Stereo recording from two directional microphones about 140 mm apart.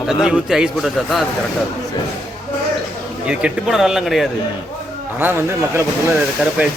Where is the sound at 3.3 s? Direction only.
10° right (ahead or behind).